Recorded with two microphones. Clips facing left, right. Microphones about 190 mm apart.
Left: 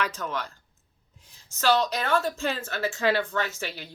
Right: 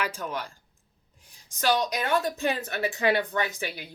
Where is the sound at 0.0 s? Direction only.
10° right (ahead or behind).